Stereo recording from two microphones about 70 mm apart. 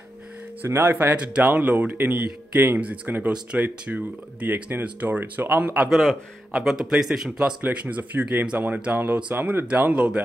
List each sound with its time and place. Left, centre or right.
0.7 s speech: right
6.5 s speech: centre; by 9.7 s right
9.7 s speech: centre